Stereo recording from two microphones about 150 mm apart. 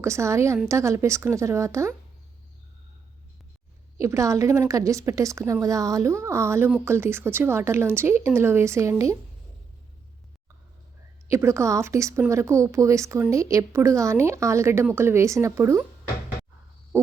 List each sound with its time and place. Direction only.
0.0 s a woman's voice: 20° right (ahead or behind)
4.0 s a woman's voice: 20° right (ahead or behind)
11.3 s a woman's voice: 20° right (ahead or behind)